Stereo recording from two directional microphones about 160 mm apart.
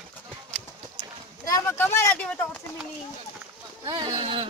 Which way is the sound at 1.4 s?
20° left (ahead or behind).